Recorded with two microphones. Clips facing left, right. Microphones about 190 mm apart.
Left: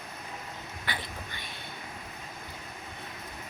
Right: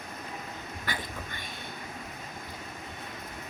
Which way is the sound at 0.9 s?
45° right (ahead or behind).